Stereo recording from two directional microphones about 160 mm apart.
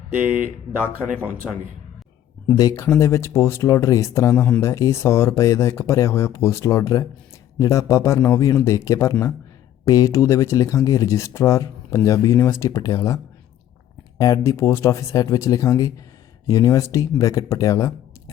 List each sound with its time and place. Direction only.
0.1 s speech: 10° right (ahead or behind)
2.5 s speech: 20° left (ahead or behind)
14.2 s speech: 20° left (ahead or behind)